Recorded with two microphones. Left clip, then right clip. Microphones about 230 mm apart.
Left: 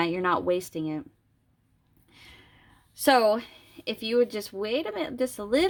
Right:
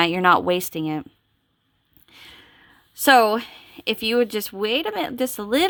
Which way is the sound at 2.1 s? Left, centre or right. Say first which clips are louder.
Right 7 dB; right.